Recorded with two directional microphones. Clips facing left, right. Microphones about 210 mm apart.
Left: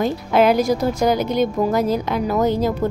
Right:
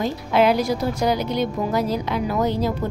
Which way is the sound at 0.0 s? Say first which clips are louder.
Left 2 dB; 45° left (ahead or behind).